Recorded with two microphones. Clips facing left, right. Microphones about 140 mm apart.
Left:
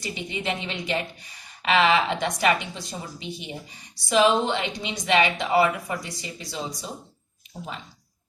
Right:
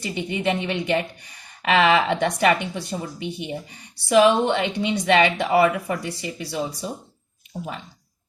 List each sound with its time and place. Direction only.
0.0 s a woman's voice: 60° right (ahead or behind)